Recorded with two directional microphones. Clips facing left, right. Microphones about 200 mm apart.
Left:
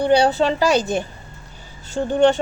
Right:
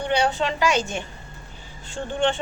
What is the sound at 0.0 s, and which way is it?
A woman's voice, 35° left (ahead or behind).